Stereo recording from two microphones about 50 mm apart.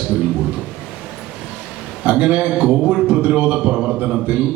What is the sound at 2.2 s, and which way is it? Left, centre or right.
Speech, centre.